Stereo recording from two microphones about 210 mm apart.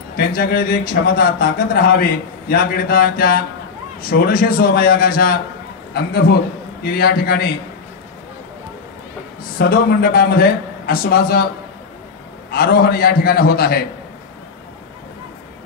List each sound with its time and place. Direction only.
0.1 s speech: 45° left (ahead or behind)
6.8 s speech: 45° left (ahead or behind)
9.6 s speech: 45° left (ahead or behind)
12.4 s speech: 45° left (ahead or behind)